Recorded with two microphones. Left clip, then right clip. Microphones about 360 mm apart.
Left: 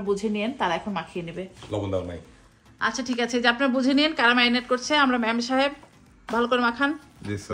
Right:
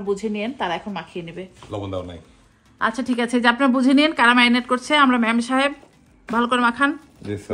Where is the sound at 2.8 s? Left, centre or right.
Centre.